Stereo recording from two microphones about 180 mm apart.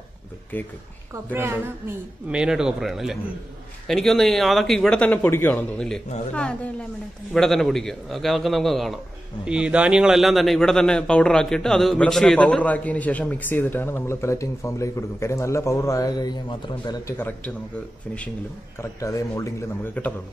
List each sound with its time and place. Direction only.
1.3 s a man's voice: 15° right (ahead or behind); by 17.0 s 25° left (ahead or behind)
18.8 s a man's voice: 15° left (ahead or behind)